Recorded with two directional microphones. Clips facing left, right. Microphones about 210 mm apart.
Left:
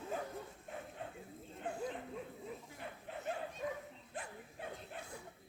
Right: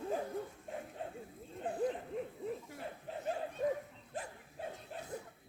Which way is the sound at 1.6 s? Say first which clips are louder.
Right 6 dB; 35° right (ahead or behind).